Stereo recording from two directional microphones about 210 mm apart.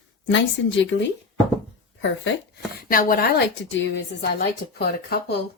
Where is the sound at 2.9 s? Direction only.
45° left (ahead or behind).